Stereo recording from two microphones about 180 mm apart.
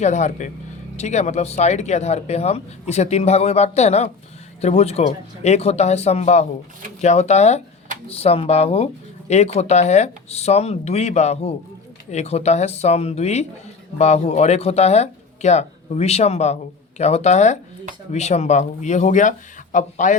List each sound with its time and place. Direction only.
0.0 s a man's voice: 40° left (ahead or behind)